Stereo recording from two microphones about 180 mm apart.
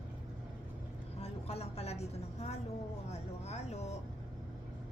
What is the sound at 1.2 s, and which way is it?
A woman's voice, 35° left (ahead or behind).